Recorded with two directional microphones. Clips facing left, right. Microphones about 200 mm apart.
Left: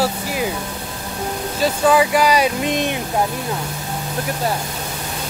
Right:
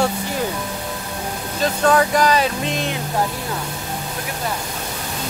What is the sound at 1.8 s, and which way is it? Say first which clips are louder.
Speech: left 1 dB; 5° left (ahead or behind).